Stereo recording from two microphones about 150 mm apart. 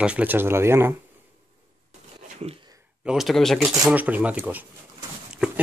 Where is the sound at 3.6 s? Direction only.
10° right (ahead or behind).